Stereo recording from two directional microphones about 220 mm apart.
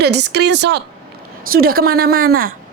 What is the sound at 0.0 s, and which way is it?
A woman's voice, 50° right (ahead or behind).